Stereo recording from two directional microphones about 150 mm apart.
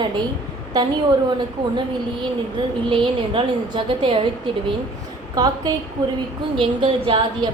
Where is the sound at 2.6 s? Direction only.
30° right (ahead or behind).